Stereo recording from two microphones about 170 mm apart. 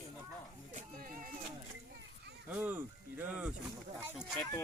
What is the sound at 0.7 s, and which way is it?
Speech, 50° right (ahead or behind).